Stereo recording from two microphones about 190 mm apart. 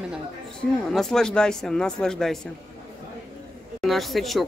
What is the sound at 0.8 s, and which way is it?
Speech, centre (ahead or behind).